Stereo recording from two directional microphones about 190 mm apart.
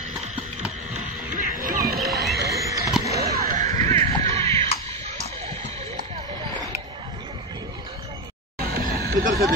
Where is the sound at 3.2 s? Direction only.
55° right (ahead or behind).